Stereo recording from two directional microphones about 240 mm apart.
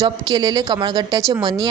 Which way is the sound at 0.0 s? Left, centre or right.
Centre.